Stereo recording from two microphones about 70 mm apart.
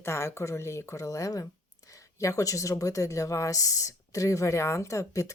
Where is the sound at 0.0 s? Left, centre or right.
Left.